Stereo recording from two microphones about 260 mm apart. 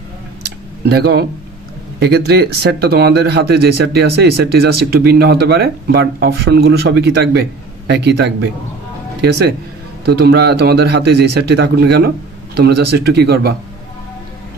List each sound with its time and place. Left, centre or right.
0.8 s speech: right